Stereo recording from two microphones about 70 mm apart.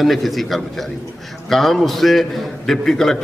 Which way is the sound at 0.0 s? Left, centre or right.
Centre.